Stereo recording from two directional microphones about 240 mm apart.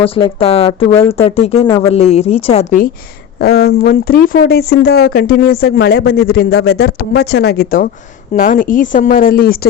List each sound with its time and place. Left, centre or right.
0.0 s speech: left
1.6 s speech: centre
1.9 s speech: left
3.4 s speech: left